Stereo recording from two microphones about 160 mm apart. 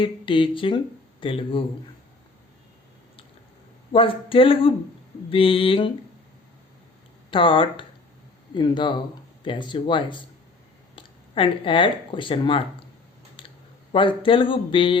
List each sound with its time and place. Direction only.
0.0 s speech: 30° left (ahead or behind)
3.9 s speech: 35° left (ahead or behind)
7.3 s speech: 35° left (ahead or behind)
13.9 s speech: 30° left (ahead or behind)